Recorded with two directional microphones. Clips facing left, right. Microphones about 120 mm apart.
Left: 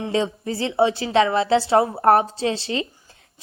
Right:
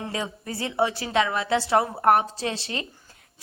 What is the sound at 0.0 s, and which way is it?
A woman's voice, 25° left (ahead or behind).